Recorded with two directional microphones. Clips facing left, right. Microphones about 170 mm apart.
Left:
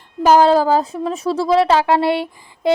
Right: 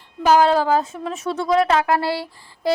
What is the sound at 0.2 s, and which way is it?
A woman's voice, 40° left (ahead or behind).